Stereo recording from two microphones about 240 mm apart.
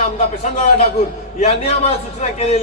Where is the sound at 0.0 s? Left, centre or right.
Left.